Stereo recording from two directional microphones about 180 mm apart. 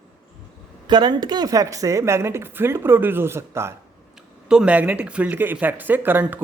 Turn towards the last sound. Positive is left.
turn(degrees=-10)  # may be behind; listen again after turning